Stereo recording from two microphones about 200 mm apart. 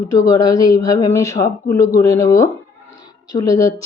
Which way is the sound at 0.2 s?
20° left (ahead or behind).